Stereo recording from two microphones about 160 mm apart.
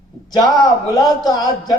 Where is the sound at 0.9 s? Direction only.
25° left (ahead or behind).